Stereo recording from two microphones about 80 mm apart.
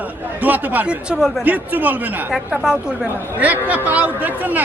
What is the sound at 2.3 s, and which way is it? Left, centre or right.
Speech, centre.